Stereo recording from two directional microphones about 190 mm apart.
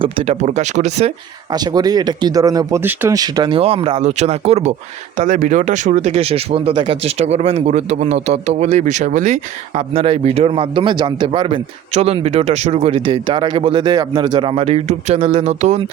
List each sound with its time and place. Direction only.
0.0 s speech: 30° right (ahead or behind)
1.5 s speech: 20° right (ahead or behind); by 15.8 s 35° right (ahead or behind)